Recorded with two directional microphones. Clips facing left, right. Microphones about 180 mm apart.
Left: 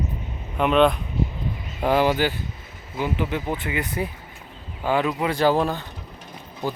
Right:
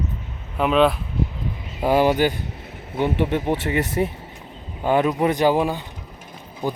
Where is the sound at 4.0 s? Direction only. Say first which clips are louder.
Right 7 dB; 40° right (ahead or behind).